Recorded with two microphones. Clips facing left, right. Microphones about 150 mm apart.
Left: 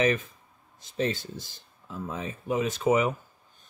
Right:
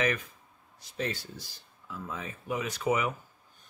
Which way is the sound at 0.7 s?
25° left (ahead or behind).